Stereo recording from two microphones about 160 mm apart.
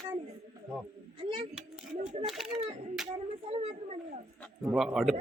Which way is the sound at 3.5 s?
40° right (ahead or behind).